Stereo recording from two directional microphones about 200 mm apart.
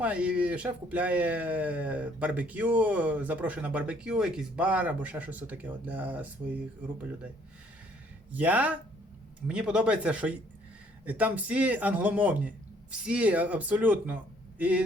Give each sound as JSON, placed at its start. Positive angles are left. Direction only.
{"t": 0.0, "sound": "speech", "side_deg": -5}
{"t": 8.3, "sound": "speech", "side_deg": -10}